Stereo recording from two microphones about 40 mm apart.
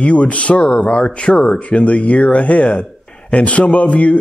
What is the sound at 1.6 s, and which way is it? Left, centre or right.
A man's voice, left.